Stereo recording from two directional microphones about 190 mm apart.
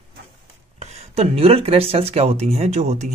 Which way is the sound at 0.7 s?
35° right (ahead or behind).